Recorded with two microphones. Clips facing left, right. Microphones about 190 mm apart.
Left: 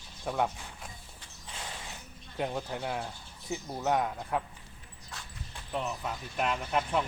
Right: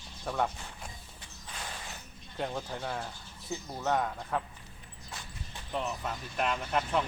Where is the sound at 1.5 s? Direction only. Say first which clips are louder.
Even; 20° left (ahead or behind).